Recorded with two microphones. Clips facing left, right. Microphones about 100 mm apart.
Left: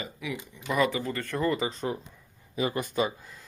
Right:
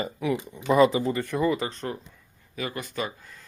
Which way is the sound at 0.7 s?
25° right (ahead or behind).